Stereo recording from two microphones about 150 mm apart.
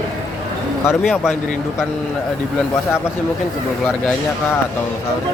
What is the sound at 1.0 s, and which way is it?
Speech, 5° right (ahead or behind).